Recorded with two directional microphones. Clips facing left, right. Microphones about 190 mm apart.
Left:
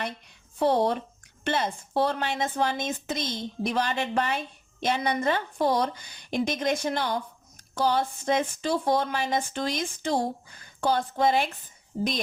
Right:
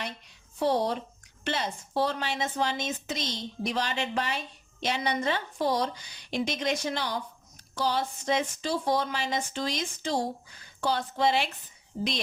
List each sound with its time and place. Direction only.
0.6 s a woman's voice: 55° left (ahead or behind)